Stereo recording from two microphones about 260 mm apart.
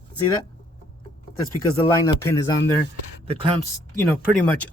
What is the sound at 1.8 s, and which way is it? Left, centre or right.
Speech, centre.